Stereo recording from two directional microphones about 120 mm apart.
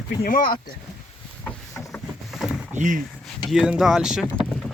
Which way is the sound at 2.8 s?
90° right.